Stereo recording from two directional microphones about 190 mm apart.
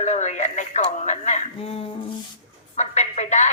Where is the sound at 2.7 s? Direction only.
35° left (ahead or behind).